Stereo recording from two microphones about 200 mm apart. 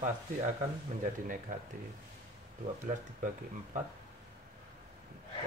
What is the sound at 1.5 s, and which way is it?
Speech, 45° right (ahead or behind).